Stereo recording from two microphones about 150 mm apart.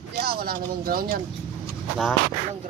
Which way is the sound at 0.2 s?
90° right.